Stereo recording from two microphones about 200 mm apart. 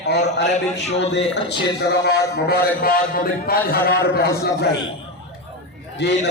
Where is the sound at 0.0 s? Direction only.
55° left (ahead or behind).